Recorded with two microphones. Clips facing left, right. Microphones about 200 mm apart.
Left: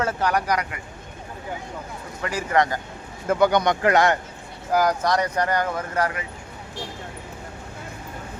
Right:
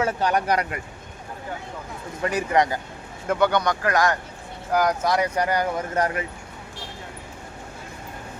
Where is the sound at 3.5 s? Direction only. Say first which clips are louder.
Left 3 dB; 20° left (ahead or behind).